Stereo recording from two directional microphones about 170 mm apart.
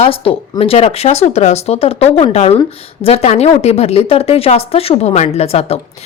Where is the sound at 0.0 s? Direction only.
35° left (ahead or behind).